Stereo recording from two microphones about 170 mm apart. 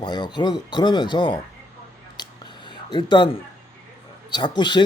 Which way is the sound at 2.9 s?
25° left (ahead or behind).